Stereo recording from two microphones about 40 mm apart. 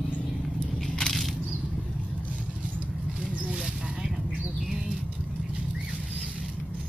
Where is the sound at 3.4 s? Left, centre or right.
Centre.